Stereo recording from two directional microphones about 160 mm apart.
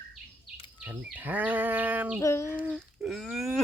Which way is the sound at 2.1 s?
15° left (ahead or behind).